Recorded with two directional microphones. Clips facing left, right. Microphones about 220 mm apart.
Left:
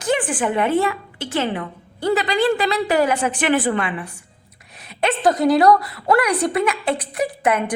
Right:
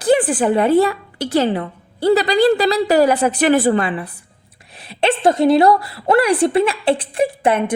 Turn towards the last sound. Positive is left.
turn(degrees=-30)  # may be behind; listen again after turning